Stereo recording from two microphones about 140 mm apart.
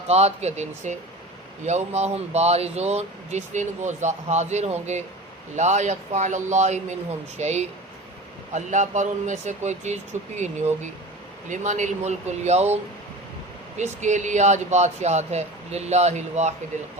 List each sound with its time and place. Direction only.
0.1 s speech: 50° right (ahead or behind)